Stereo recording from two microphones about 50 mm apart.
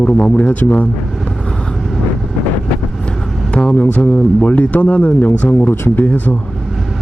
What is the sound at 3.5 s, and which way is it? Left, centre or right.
Speech, centre.